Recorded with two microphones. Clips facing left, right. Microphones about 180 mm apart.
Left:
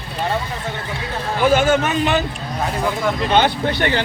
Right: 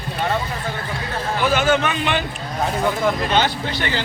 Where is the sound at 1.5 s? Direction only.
45° left (ahead or behind).